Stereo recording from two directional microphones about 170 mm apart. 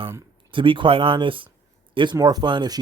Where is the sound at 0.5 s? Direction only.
30° right (ahead or behind).